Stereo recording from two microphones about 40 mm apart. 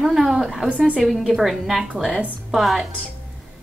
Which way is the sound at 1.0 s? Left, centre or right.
Centre.